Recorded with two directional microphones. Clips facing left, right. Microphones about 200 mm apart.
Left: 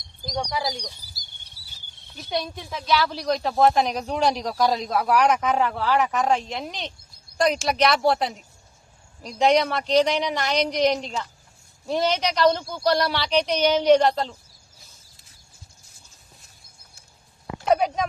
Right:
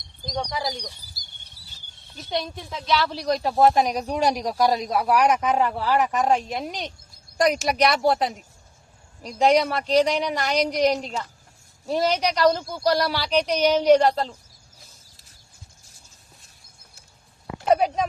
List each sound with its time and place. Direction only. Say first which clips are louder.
0.3 s speech: left 1 dB; 15° left (ahead or behind)
2.1 s speech: even; centre (ahead or behind)
17.7 s a sound: right 1 dB; centre (ahead or behind)